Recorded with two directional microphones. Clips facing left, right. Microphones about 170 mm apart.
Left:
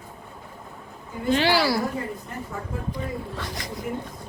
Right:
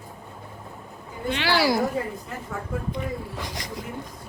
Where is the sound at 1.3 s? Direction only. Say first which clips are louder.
Left 5 dB; 35° left (ahead or behind).